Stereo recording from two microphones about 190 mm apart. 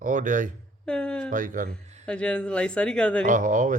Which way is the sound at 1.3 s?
45° right (ahead or behind).